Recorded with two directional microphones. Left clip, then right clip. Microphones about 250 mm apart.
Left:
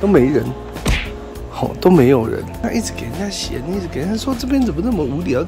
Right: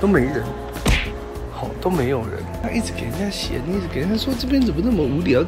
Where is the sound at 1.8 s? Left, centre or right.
Left.